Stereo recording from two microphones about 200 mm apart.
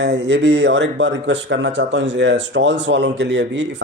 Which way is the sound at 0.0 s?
60° right (ahead or behind).